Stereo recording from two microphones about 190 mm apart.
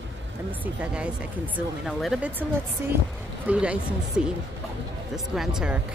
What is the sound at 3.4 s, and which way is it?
Speech, 5° right (ahead or behind).